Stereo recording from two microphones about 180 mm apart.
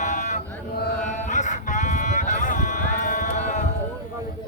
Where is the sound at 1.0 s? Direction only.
45° left (ahead or behind).